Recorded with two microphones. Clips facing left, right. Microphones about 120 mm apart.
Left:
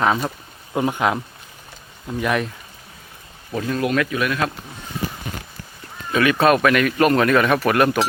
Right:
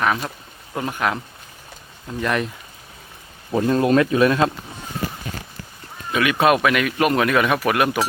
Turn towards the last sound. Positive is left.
turn(degrees=-10)  # may be behind; listen again after turning